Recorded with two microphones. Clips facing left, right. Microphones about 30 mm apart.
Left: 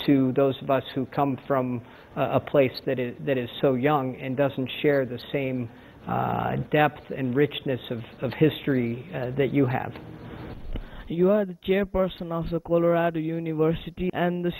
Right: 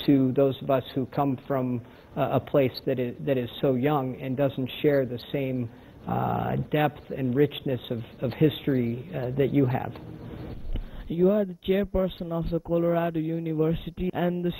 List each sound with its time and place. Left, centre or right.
0.0 s speech: centre
4.5 s speech: centre
11.1 s speech: centre